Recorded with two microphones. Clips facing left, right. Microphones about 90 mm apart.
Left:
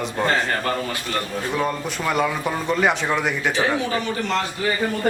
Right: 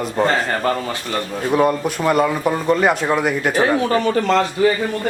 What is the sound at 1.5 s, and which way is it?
Speech, 10° right (ahead or behind).